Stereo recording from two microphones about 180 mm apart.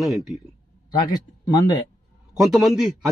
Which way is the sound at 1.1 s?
20° left (ahead or behind).